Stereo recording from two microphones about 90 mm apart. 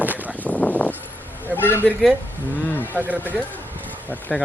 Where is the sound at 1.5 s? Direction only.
25° left (ahead or behind).